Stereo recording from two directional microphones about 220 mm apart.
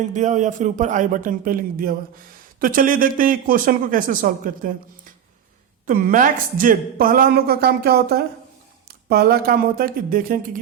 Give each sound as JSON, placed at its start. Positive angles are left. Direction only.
{"t": 0.1, "sound": "a woman's voice", "side_deg": -35}
{"t": 5.8, "sound": "a woman's voice", "side_deg": -40}